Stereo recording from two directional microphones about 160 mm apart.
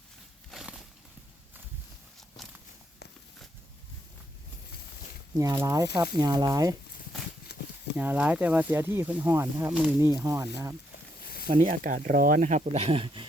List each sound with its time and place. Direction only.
0.5 s a sound: 5° right (ahead or behind)
2.4 s walk: centre (ahead or behind)
5.4 s speech: 20° right (ahead or behind)
7.5 s a sound: 90° left
7.9 s speech: 10° right (ahead or behind)
11.6 s speech: 55° right (ahead or behind); by 13.2 s 35° right (ahead or behind)